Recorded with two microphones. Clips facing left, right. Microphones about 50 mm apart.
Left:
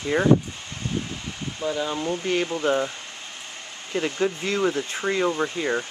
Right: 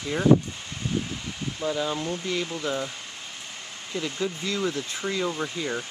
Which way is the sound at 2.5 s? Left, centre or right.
Left.